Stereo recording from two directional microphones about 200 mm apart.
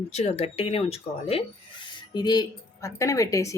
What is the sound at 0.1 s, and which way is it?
Speech, 35° left (ahead or behind).